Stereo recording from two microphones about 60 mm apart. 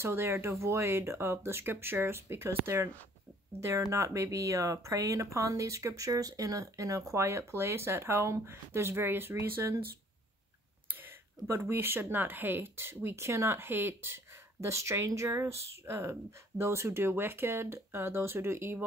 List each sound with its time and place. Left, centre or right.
0.0 s speech: right
3.9 s speech: right
7.2 s speech: right
11.6 s speech: right